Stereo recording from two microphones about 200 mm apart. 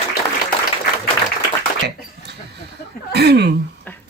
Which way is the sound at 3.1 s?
55° right (ahead or behind).